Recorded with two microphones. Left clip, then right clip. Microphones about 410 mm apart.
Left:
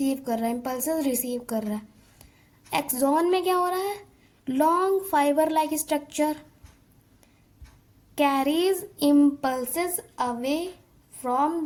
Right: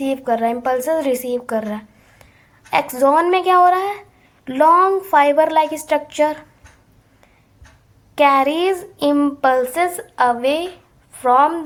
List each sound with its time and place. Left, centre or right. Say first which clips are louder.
0.3 s speech: right 11 dB; left
8.2 s speech: right 9 dB; left